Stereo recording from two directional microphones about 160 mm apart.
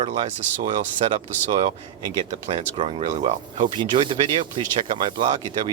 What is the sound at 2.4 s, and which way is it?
Speech, 35° right (ahead or behind).